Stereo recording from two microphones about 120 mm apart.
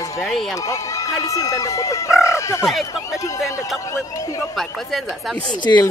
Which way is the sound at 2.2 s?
25° left (ahead or behind).